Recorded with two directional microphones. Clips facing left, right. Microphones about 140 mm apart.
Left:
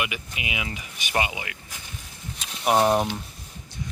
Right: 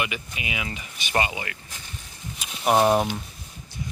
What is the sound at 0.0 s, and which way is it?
Speech, 15° left (ahead or behind).